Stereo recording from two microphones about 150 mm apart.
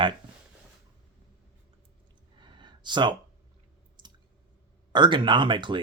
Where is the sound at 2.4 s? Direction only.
30° right (ahead or behind).